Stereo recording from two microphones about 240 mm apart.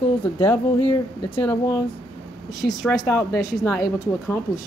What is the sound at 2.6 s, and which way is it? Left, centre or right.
Speech, centre.